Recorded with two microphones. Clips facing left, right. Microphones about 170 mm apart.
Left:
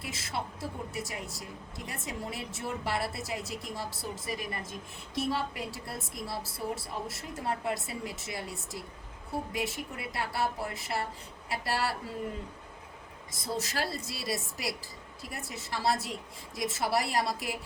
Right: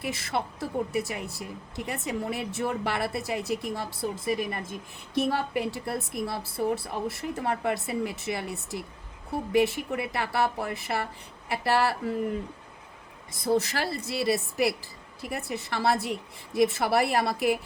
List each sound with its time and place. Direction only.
0.0 s a woman's voice: 60° right (ahead or behind)
13.4 s a woman's voice: 60° right (ahead or behind)